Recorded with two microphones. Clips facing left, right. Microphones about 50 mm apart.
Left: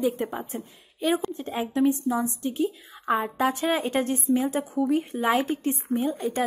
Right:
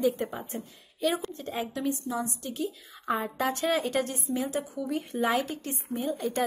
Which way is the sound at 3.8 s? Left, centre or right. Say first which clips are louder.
Left 3 dB; left.